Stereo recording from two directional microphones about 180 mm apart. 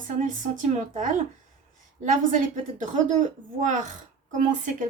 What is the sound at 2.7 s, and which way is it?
A woman's voice, 45° right (ahead or behind).